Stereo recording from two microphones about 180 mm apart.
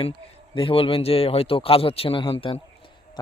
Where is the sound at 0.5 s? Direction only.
30° left (ahead or behind).